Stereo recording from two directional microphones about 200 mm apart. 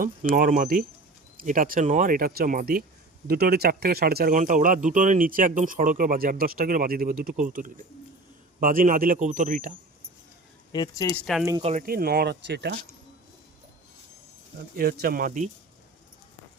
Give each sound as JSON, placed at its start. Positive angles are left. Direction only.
{"t": 0.3, "sound": "speech", "side_deg": -45}
{"t": 10.7, "sound": "speech", "side_deg": 20}
{"t": 11.6, "sound": "speech", "side_deg": -35}
{"t": 11.9, "sound": "speech", "side_deg": -50}
{"t": 14.8, "sound": "speech", "side_deg": -50}